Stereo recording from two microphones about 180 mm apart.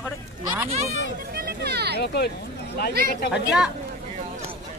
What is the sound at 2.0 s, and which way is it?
Speech, 65° left (ahead or behind).